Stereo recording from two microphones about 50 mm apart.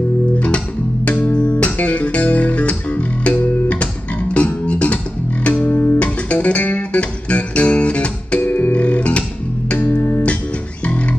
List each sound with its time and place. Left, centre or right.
1.0 s music: left
8.4 s music: left